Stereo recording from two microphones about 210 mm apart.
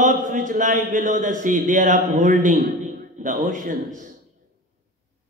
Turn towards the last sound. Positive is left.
turn(degrees=-40)  # may be behind; listen again after turning